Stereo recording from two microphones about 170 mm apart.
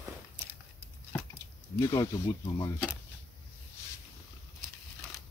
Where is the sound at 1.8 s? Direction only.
20° left (ahead or behind).